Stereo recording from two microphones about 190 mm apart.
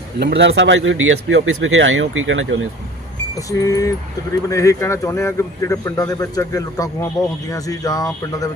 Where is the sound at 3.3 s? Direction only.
20° left (ahead or behind).